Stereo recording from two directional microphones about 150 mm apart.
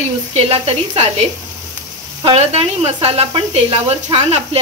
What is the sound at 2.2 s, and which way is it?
Speech, 40° right (ahead or behind).